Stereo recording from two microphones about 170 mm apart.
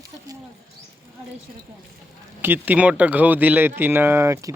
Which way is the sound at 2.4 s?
10° right (ahead or behind).